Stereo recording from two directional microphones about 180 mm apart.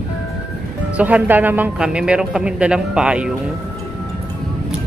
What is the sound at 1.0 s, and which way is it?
Speech, 10° right (ahead or behind).